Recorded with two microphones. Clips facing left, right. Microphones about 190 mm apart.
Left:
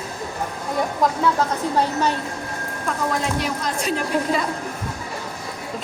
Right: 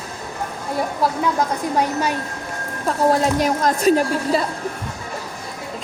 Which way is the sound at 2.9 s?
40° right (ahead or behind).